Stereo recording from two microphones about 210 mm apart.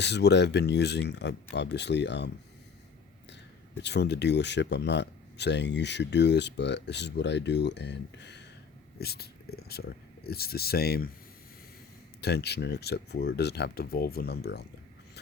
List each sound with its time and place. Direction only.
0.0 s speech: 55° left (ahead or behind)
3.8 s speech: 55° left (ahead or behind)
12.2 s speech: 50° left (ahead or behind)